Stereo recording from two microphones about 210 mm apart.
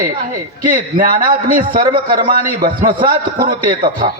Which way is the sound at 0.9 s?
40° right (ahead or behind).